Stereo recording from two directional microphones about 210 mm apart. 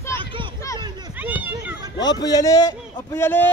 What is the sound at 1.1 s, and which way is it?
Children playing, 10° right (ahead or behind).